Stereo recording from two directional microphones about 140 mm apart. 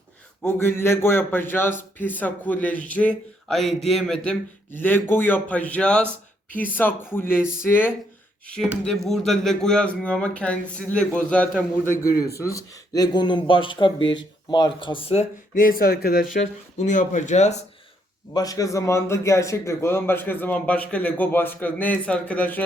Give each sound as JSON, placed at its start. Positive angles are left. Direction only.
{"t": 0.4, "sound": "a man's voice", "side_deg": 15}
{"t": 8.9, "sound": "a man's voice", "side_deg": 0}
{"t": 12.0, "sound": "speech", "side_deg": 25}
{"t": 15.5, "sound": "speech", "side_deg": 85}
{"t": 18.3, "sound": "a man's voice", "side_deg": 25}